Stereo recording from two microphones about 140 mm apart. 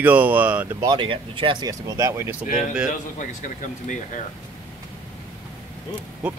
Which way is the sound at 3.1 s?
65° left (ahead or behind).